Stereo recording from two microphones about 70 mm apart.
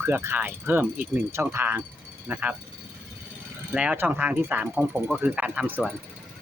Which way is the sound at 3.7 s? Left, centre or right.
Centre.